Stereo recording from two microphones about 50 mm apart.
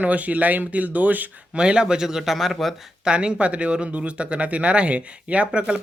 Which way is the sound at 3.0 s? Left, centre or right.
Centre.